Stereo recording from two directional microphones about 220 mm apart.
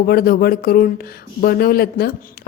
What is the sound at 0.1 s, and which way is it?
A woman's voice, 45° left (ahead or behind).